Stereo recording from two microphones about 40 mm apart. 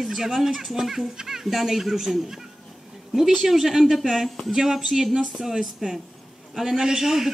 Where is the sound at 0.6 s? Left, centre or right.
Centre.